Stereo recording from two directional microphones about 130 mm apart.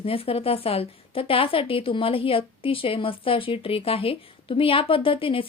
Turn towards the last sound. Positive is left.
turn(degrees=45)  # may be behind; listen again after turning